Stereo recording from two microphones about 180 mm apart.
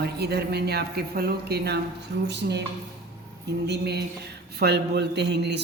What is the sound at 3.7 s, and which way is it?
Speech, 65° right (ahead or behind).